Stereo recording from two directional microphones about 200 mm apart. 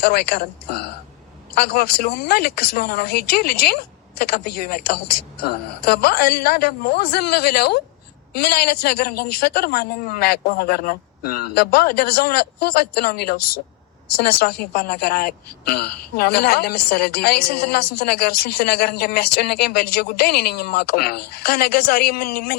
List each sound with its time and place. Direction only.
0.0 s a woman's voice: 50° left (ahead or behind)